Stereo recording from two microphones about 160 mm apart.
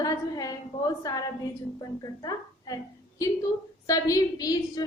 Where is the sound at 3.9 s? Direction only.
20° left (ahead or behind).